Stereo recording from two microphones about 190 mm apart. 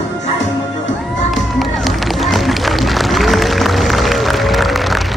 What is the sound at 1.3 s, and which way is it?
Music, centre (ahead or behind).